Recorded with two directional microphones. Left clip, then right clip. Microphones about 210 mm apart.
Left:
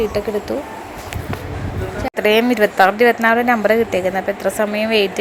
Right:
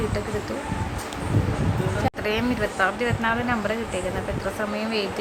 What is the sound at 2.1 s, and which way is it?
A woman's voice, 25° left (ahead or behind).